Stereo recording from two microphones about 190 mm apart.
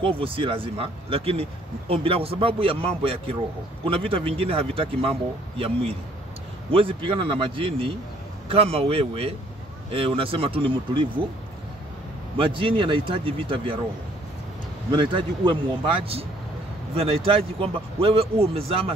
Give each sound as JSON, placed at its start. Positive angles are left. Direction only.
{"t": 0.2, "sound": "speech", "side_deg": -30}
{"t": 6.7, "sound": "speech", "side_deg": -30}
{"t": 12.4, "sound": "speech", "side_deg": -25}
{"t": 14.9, "sound": "speech", "side_deg": -25}